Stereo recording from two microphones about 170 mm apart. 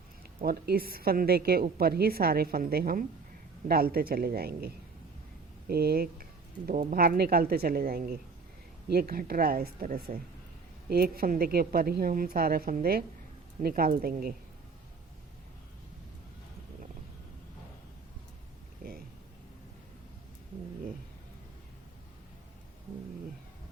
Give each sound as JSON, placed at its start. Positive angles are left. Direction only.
{"t": 0.2, "sound": "a woman's voice", "side_deg": -65}